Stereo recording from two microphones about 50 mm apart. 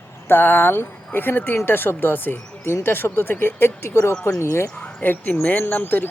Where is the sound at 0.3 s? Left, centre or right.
Left.